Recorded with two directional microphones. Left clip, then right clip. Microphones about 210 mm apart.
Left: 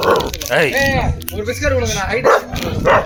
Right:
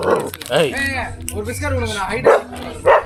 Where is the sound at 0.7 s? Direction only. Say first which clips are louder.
Left 5 dB; 45° right (ahead or behind).